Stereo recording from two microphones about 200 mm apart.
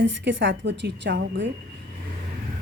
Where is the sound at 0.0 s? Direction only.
65° right (ahead or behind).